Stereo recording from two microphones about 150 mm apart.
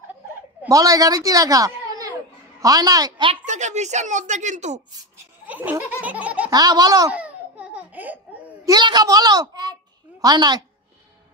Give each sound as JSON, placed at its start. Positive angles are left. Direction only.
{"t": 0.7, "sound": "a woman's voice", "side_deg": -25}
{"t": 3.4, "sound": "speech", "side_deg": -50}
{"t": 5.1, "sound": "laughter", "side_deg": -10}
{"t": 6.5, "sound": "a woman's voice", "side_deg": -25}
{"t": 7.1, "sound": "laughter", "side_deg": -10}
{"t": 8.6, "sound": "a woman's voice", "side_deg": -30}